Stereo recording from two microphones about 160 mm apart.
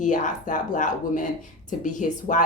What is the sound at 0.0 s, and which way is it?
Speech, 50° left (ahead or behind).